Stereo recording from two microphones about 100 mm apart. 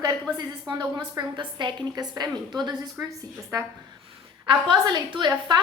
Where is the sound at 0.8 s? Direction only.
35° right (ahead or behind).